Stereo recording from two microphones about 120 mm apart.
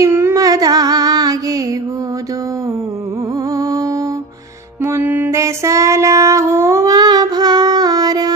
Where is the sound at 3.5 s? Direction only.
25° right (ahead or behind).